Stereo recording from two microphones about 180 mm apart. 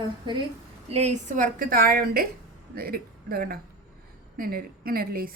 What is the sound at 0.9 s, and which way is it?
Speech, 40° right (ahead or behind).